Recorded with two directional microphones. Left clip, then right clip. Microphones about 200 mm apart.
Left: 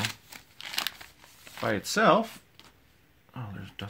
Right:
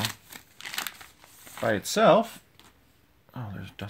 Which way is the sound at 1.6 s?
35° right (ahead or behind).